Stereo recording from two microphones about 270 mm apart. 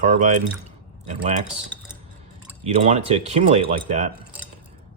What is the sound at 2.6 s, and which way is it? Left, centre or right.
Speech, right.